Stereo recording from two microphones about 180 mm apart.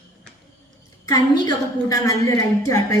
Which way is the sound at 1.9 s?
20° left (ahead or behind).